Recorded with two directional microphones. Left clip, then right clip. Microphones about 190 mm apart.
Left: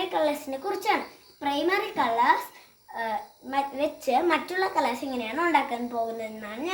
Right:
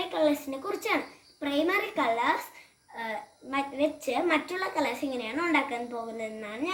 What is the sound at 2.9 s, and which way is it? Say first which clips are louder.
A child's voice: left 5 dB; 25° left (ahead or behind).